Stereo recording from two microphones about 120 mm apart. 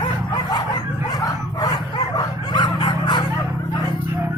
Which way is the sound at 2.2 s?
40° left (ahead or behind).